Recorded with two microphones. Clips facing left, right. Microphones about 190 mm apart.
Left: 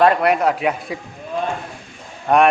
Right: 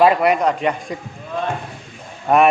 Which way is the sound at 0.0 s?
Centre (ahead or behind).